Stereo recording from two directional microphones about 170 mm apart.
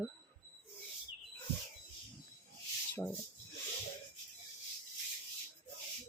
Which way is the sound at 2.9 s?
10° left (ahead or behind).